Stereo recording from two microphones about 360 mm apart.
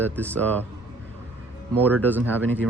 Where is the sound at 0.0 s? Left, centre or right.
Centre.